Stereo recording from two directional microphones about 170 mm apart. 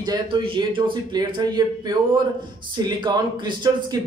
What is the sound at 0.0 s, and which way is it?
A man's voice, 25° right (ahead or behind).